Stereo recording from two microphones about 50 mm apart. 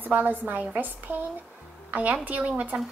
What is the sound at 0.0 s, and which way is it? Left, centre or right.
A woman's voice, right.